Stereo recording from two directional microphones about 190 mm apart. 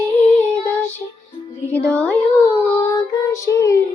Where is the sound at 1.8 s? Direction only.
5° left (ahead or behind).